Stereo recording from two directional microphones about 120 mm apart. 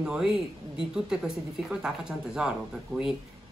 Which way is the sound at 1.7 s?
5° right (ahead or behind).